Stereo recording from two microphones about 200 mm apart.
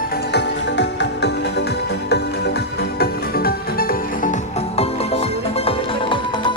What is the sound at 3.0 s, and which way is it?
Music, 50° left (ahead or behind).